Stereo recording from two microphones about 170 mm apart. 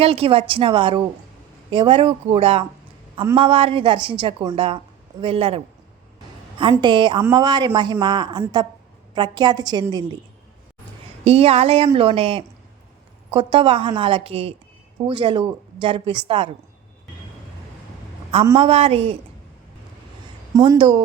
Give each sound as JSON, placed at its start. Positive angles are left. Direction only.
{"t": 0.0, "sound": "a woman's voice", "side_deg": -35}
{"t": 11.2, "sound": "a woman's voice", "side_deg": -35}
{"t": 18.5, "sound": "a woman's voice", "side_deg": -35}
{"t": 20.6, "sound": "speech", "side_deg": -30}